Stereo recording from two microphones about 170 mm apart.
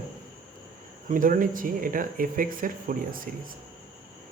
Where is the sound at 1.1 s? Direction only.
55° right (ahead or behind).